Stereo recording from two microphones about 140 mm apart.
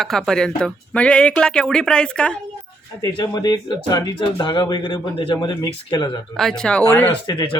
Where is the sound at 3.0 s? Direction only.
25° left (ahead or behind).